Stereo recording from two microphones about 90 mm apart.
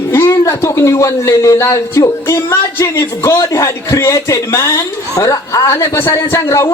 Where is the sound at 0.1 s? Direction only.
35° left (ahead or behind).